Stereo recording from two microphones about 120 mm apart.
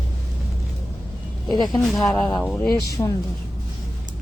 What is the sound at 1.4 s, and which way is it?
Speech, 35° left (ahead or behind).